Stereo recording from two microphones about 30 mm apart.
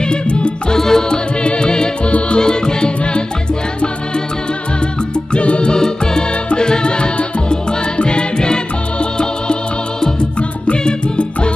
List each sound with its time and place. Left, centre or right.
0.0 s music: left
0.7 s music: centre
1.1 s music: left
2.0 s music: left
2.4 s music: left
5.4 s music: left
5.8 s music: left
10.7 s music: left